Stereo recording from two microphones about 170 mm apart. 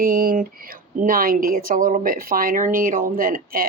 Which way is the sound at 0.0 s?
60° right (ahead or behind).